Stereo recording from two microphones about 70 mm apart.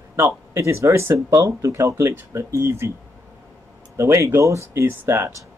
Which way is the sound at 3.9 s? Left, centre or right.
Right.